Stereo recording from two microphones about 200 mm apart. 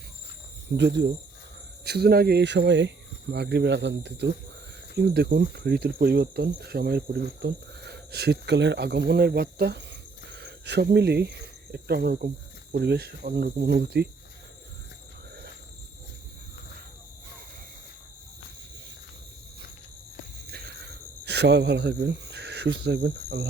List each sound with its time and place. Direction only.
0.8 s speech: 60° right (ahead or behind)
21.2 s speech: 60° right (ahead or behind)